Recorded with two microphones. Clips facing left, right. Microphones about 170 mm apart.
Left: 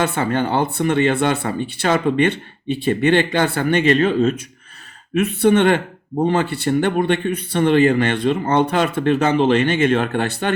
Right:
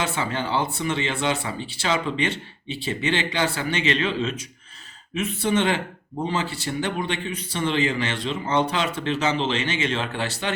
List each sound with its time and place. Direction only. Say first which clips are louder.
0.0 s speech: left 7 dB; 55° left (ahead or behind)
5.1 s speech: left 8 dB; 60° left (ahead or behind)